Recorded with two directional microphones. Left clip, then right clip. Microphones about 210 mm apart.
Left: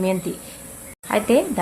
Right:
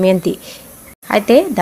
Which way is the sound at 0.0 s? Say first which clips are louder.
Right 10 dB; 35° right (ahead or behind).